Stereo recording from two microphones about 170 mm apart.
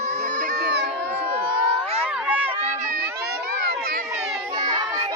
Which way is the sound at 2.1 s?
10° right (ahead or behind).